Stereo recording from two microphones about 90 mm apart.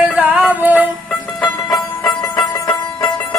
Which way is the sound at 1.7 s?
45° left (ahead or behind).